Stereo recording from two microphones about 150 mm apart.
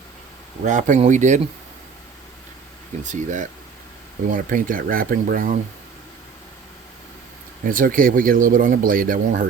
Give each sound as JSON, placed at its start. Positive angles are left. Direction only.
{"t": 0.6, "sound": "speech", "side_deg": -55}
{"t": 3.0, "sound": "speech", "side_deg": -55}
{"t": 7.6, "sound": "speech", "side_deg": -65}